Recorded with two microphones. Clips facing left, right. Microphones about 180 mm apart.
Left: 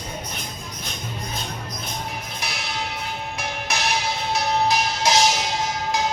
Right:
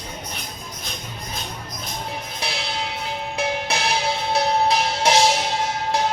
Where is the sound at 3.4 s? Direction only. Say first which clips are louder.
Right 6 dB; 30° right (ahead or behind).